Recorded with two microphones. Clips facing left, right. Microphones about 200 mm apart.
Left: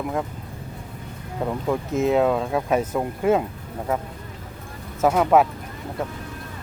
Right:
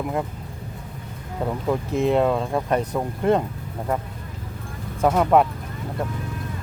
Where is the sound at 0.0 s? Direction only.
5° right (ahead or behind).